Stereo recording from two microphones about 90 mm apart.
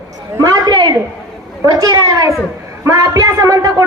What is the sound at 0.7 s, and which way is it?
A woman's voice, 55° right (ahead or behind).